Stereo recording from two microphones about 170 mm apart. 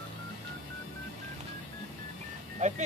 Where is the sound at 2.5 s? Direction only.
40° right (ahead or behind).